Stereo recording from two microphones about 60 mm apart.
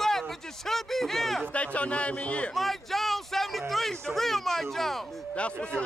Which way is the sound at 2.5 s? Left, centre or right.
Centre.